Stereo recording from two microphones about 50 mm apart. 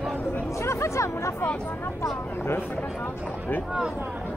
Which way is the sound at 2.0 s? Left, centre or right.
Left.